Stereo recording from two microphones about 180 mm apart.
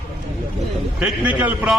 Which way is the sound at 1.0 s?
10° right (ahead or behind).